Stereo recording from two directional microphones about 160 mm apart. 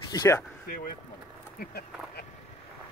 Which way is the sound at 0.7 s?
65° left (ahead or behind).